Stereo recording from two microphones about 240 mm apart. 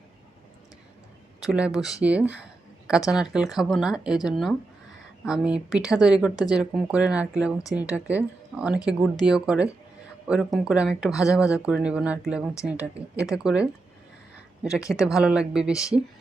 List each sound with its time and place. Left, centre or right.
1.4 s speech: centre
6.3 s speech: centre
6.6 s speech: centre
11.1 s speech: centre
11.5 s speech: centre